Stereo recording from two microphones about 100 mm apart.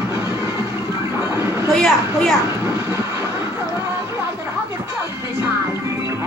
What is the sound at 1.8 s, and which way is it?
Speech, centre (ahead or behind).